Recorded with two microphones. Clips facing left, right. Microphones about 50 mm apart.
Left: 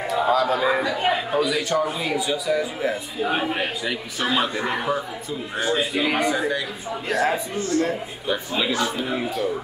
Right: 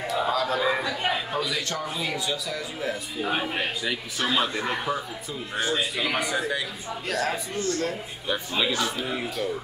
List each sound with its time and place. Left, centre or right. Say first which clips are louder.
0.0 s a sound: left 5 dB; centre
1.1 s a man's voice: left 6 dB; centre
7.1 s a man's voice: left 5 dB; centre
8.3 s a man's voice: left 2 dB; centre